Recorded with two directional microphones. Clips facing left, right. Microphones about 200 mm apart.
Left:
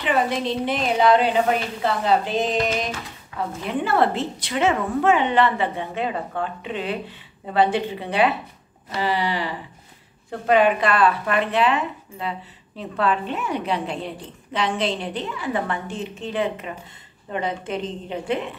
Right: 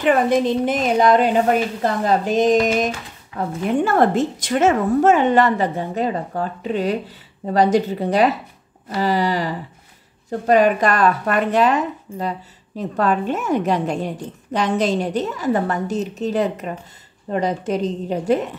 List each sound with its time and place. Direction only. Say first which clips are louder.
0.0 s a woman's voice: right 6 dB; 45° right (ahead or behind)